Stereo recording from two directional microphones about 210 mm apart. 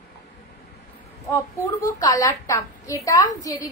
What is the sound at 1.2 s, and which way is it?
A woman's voice, 10° left (ahead or behind).